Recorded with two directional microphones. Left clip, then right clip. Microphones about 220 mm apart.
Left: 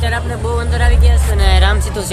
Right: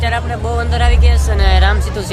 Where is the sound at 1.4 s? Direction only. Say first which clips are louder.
Even; centre (ahead or behind).